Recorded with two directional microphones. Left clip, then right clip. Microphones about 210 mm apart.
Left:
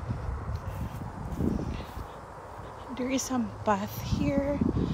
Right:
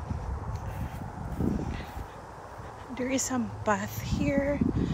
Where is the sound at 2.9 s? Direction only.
15° left (ahead or behind).